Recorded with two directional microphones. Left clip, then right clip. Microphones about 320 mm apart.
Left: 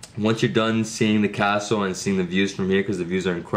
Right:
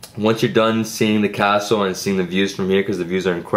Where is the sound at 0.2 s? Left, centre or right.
Centre.